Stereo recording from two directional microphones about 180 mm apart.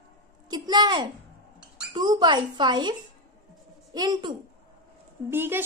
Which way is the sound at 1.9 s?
25° right (ahead or behind).